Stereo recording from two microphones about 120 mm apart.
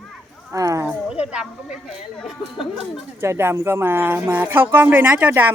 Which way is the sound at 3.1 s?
20° right (ahead or behind).